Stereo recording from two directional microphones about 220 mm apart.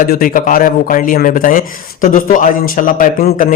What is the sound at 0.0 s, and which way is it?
A man's voice, 40° left (ahead or behind).